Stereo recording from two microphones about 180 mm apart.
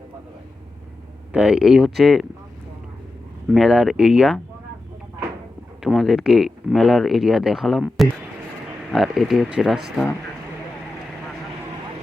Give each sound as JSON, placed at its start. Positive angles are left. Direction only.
{"t": 1.3, "sound": "speech", "side_deg": -5}
{"t": 3.5, "sound": "speech", "side_deg": 0}
{"t": 5.8, "sound": "speech", "side_deg": 0}